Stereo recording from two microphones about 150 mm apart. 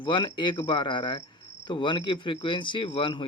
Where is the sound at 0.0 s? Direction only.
35° left (ahead or behind).